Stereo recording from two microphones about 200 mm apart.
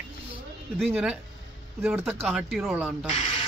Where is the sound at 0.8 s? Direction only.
5° right (ahead or behind).